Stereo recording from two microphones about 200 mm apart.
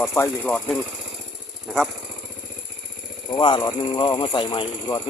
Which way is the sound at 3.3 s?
20° left (ahead or behind).